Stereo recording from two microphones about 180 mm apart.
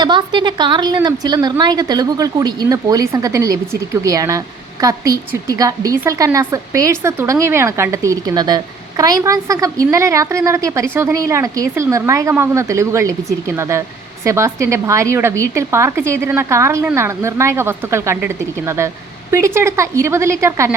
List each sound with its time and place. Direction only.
0.0 s a woman's voice: 25° right (ahead or behind)